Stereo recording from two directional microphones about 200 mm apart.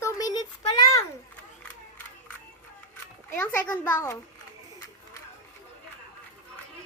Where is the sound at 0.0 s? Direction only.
20° left (ahead or behind).